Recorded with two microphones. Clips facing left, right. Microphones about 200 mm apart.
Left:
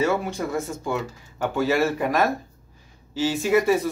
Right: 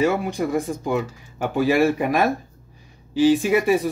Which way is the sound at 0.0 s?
15° right (ahead or behind).